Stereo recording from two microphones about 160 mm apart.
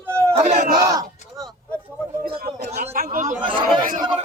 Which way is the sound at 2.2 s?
70° right (ahead or behind).